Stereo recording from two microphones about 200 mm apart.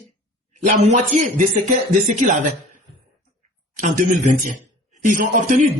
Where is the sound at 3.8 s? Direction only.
40° right (ahead or behind).